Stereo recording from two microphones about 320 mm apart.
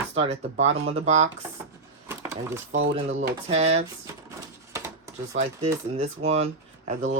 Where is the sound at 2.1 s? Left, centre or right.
Centre.